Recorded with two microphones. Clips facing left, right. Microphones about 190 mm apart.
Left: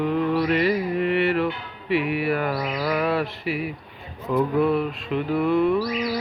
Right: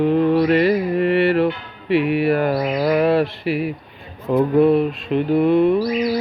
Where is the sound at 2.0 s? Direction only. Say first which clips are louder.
Right 7 dB; 75° right (ahead or behind).